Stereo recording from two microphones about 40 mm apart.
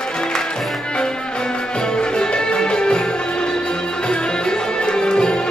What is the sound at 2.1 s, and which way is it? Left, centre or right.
Music, left.